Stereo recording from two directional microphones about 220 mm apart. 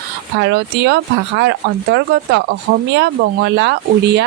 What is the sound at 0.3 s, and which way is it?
Speech, 50° right (ahead or behind).